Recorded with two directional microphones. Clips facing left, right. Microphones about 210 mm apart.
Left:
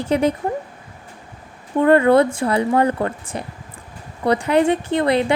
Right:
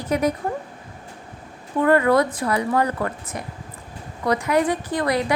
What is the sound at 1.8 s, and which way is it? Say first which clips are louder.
Speech: left 4 dB; 30° left (ahead or behind).